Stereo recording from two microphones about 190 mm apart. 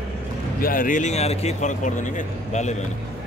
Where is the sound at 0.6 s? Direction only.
45° left (ahead or behind).